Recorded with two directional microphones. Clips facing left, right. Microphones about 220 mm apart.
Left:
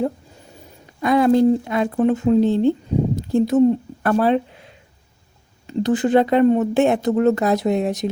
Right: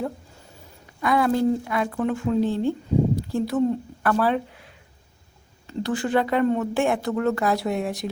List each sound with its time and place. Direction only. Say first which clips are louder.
1.0 s speech: left 6 dB; 25° left (ahead or behind)